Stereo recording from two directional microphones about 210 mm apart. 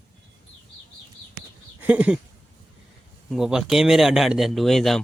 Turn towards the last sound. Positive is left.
turn(degrees=0)  # may be behind; listen again after turning